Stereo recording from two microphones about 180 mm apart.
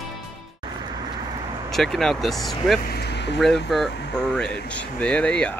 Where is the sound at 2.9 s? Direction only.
65° left (ahead or behind).